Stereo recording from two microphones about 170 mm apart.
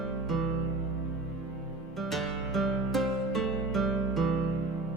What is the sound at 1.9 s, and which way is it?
Music, centre (ahead or behind).